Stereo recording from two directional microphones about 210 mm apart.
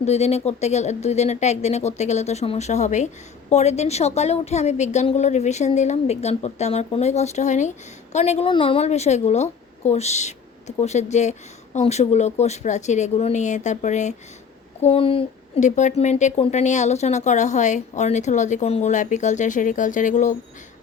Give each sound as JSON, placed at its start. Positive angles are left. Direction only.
{"t": 0.0, "sound": "a woman's voice", "side_deg": 30}